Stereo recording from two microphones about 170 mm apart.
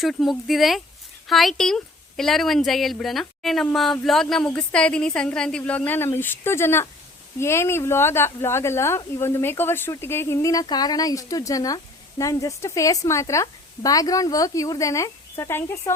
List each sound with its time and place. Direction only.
0.0 s speech: centre (ahead or behind); by 16.0 s 15° left (ahead or behind)